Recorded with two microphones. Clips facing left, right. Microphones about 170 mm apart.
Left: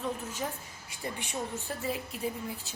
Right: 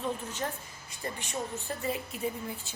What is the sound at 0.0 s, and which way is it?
A woman's voice, 10° left (ahead or behind).